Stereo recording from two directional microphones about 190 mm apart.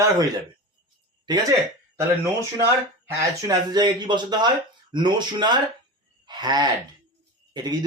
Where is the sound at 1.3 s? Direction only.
20° right (ahead or behind).